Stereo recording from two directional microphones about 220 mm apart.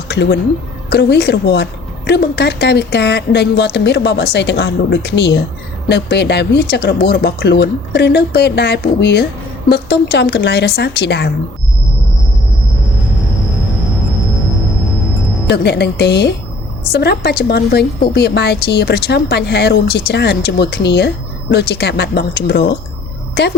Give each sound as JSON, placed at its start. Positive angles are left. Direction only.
{"t": 0.1, "sound": "a woman's voice", "side_deg": 50}
{"t": 15.4, "sound": "a woman's voice", "side_deg": 50}